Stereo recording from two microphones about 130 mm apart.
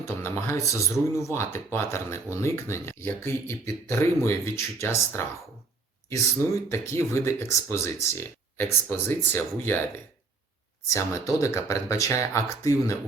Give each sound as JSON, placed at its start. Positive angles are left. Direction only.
{"t": 0.0, "sound": "speech", "side_deg": 20}
{"t": 6.7, "sound": "speech", "side_deg": 20}
{"t": 10.8, "sound": "speech", "side_deg": 25}